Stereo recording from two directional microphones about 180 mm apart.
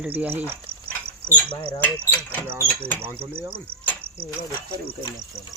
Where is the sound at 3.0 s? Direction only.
10° right (ahead or behind).